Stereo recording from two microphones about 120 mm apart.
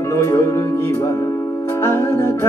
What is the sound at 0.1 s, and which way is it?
Music, 20° left (ahead or behind).